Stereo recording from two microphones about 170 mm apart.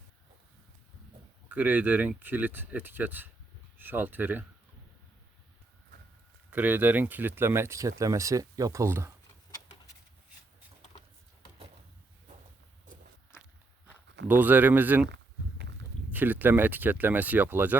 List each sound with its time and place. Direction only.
1.5 s speech: 10° right (ahead or behind)
6.5 s speech: 10° right (ahead or behind)
13.3 s walk: 15° left (ahead or behind)
14.3 s speech: 10° right (ahead or behind)
16.1 s speech: 10° right (ahead or behind)